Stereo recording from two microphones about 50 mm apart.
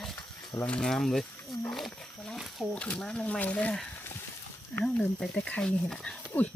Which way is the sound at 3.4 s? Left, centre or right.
Left.